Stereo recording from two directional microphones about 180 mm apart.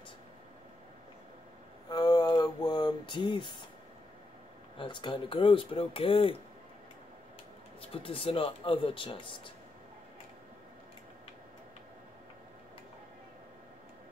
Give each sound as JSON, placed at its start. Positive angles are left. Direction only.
{"t": 1.9, "sound": "a sound", "side_deg": 20}
{"t": 4.7, "sound": "speech", "side_deg": 25}
{"t": 7.8, "sound": "speech", "side_deg": 30}